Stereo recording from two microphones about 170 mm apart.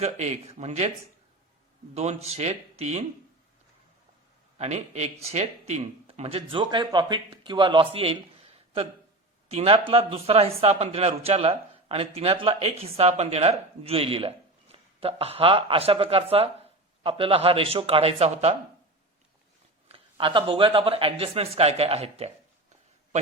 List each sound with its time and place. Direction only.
0.0 s speech: 40° right (ahead or behind)
1.9 s speech: 40° right (ahead or behind)
4.5 s speech: 40° right (ahead or behind)
7.9 s a sound: 35° right (ahead or behind)
9.5 s speech: 35° right (ahead or behind)
19.9 s speech: 30° right (ahead or behind)